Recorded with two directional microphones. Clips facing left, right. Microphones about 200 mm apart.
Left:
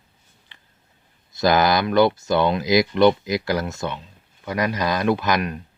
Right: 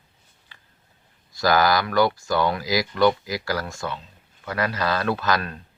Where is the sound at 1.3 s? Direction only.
20° left (ahead or behind).